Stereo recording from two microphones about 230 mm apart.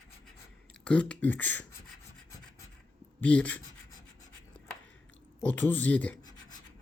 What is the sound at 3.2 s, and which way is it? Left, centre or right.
Speech, centre.